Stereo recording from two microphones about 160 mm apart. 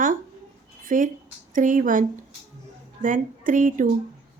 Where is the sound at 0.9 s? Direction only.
55° right (ahead or behind).